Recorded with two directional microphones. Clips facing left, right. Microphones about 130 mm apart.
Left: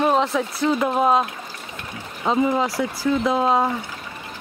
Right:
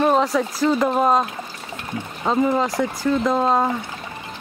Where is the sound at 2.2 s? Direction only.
5° left (ahead or behind).